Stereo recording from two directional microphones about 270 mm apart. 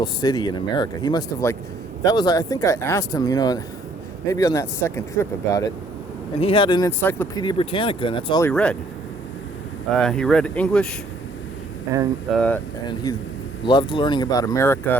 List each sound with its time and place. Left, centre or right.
0.0 s speech: centre
9.9 s speech: centre
11.9 s speech: centre
13.1 s speech: centre